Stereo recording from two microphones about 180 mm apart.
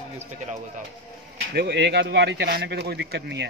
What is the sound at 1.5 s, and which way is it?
A man's voice, 70° right (ahead or behind).